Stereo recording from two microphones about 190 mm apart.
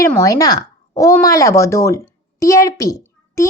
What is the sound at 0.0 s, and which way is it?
A woman's voice, 15° left (ahead or behind).